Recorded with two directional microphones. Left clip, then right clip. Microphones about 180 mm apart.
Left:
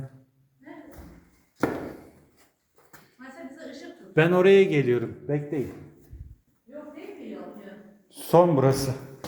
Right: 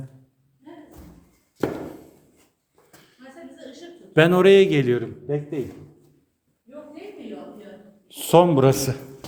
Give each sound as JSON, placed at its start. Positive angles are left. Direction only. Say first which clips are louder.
{"t": 4.1, "sound": "speech", "louder": "right 4 dB", "side_deg": -25}
{"t": 5.2, "sound": "a man's voice", "louder": "right 2 dB", "side_deg": 0}
{"t": 8.0, "sound": "a man's voice", "louder": "right 3 dB", "side_deg": -25}